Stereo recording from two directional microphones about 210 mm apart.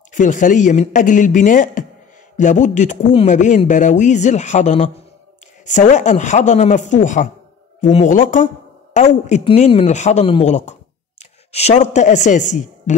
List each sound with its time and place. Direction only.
0.1 s a woman's voice: 35° left (ahead or behind)